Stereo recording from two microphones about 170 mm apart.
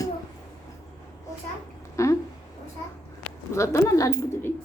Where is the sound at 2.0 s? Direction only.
15° left (ahead or behind).